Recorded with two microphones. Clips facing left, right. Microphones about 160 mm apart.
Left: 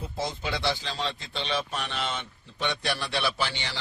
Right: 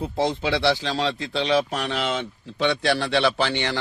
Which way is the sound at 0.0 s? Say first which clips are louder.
Right 9 dB; 75° right (ahead or behind).